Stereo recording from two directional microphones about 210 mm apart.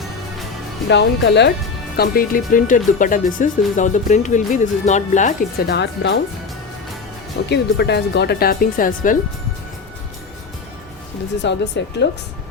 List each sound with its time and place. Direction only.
0.9 s speech: 55° left (ahead or behind)
2.0 s speech: 45° left (ahead or behind)
7.5 s speech: 50° left (ahead or behind)
11.4 s speech: 55° left (ahead or behind)